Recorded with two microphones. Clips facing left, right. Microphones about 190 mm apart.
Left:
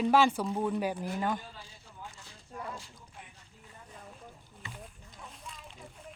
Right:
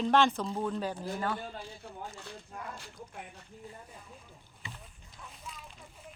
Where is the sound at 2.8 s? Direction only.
55° right (ahead or behind).